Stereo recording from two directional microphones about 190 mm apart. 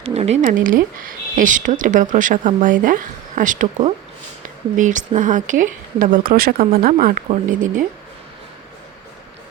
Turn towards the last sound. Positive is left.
turn(degrees=-45)  # may be behind; listen again after turning